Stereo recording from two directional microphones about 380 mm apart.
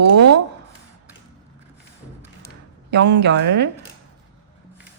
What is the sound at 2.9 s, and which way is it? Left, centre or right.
Speech, right.